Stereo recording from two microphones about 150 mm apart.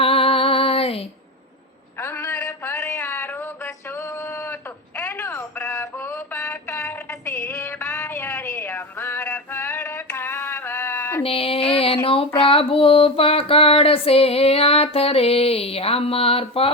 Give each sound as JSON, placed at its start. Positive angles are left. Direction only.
{"t": 0.0, "sound": "music", "side_deg": 40}
{"t": 2.0, "sound": "a sound", "side_deg": 15}
{"t": 3.8, "sound": "telephone", "side_deg": 15}
{"t": 5.7, "sound": "music", "side_deg": 15}
{"t": 6.7, "sound": "a sound", "side_deg": 10}
{"t": 11.2, "sound": "female singing", "side_deg": 40}